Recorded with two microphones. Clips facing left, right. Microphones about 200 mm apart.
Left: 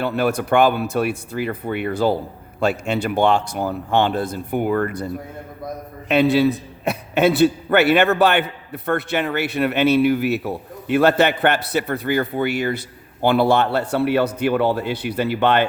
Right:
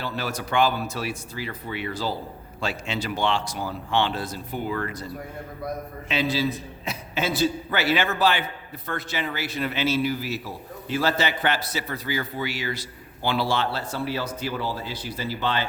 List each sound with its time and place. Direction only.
0.0 s a man's voice: 60° left (ahead or behind)